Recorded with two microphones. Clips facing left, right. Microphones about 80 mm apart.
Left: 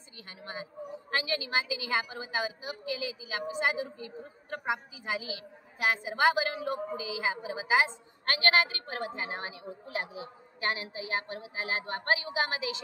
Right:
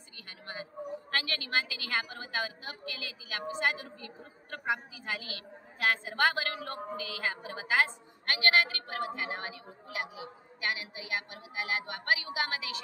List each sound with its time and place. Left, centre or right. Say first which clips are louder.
0.3 s a woman's voice: left 2 dB; left